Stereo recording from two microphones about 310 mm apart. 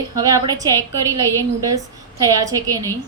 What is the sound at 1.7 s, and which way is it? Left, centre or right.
A woman's voice, centre.